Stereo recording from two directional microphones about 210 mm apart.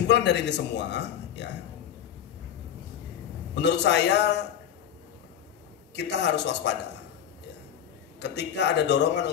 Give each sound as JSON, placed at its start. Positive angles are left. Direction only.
{"t": 0.0, "sound": "a man's voice", "side_deg": 55}
{"t": 3.5, "sound": "a man's voice", "side_deg": 55}
{"t": 5.9, "sound": "a man's voice", "side_deg": 55}
{"t": 8.2, "sound": "a man's voice", "side_deg": 55}